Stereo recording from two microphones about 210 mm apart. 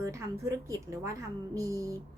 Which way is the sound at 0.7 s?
15° right (ahead or behind).